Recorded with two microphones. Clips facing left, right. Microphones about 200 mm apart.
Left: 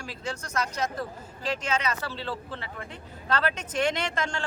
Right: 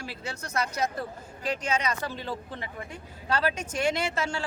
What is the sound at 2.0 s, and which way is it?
Speech, 15° right (ahead or behind).